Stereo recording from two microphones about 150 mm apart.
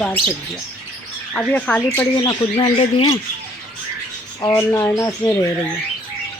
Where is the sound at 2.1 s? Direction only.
35° left (ahead or behind).